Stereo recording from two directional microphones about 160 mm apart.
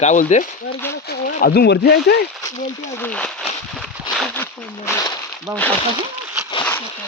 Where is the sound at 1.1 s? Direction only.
70° left (ahead or behind); by 2.1 s 90° left.